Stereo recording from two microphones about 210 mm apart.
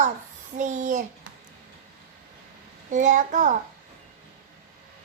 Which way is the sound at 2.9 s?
35° right (ahead or behind).